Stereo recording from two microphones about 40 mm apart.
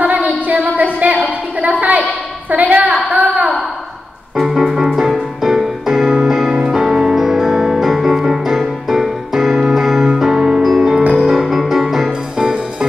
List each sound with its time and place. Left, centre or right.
0.0 s a sound: right
3.1 s wail: right
4.4 s music: centre